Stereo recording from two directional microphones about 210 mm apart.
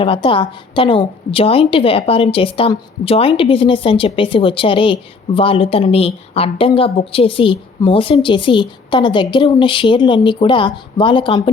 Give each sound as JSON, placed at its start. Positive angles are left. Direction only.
{"t": 0.0, "sound": "a woman's voice", "side_deg": 25}